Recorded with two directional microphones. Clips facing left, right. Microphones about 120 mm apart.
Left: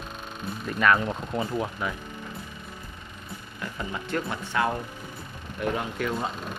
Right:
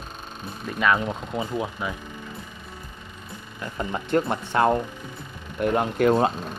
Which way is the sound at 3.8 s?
35° right (ahead or behind).